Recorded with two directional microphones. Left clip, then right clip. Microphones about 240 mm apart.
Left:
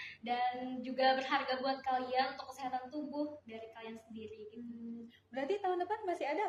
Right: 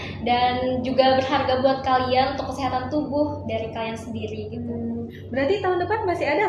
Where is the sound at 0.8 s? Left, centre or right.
Left.